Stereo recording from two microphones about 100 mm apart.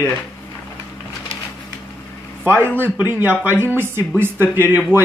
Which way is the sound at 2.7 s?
20° right (ahead or behind).